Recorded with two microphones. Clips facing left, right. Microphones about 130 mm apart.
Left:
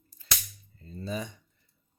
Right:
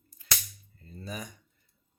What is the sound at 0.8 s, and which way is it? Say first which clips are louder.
Speech: left 5 dB; 30° left (ahead or behind).